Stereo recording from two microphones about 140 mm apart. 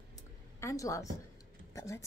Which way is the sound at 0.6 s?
20° left (ahead or behind).